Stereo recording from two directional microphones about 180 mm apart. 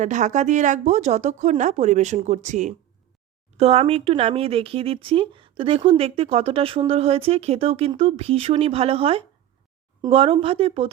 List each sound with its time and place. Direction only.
0.0 s speech: 40° right (ahead or behind)